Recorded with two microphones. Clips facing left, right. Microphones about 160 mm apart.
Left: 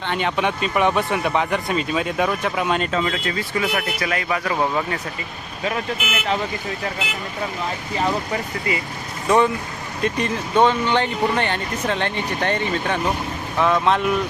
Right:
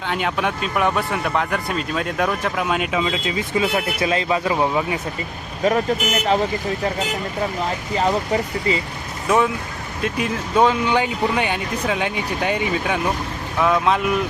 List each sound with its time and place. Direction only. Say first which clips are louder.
0.1 s speech: left 1 dB; centre (ahead or behind)
5.6 s speech: right 6 dB; 40° right (ahead or behind)
7.9 s speech: right 3 dB; 25° right (ahead or behind)
10.0 s speech: left 1 dB; 5° right (ahead or behind)